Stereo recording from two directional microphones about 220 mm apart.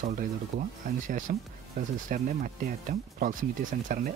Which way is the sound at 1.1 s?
35° right (ahead or behind).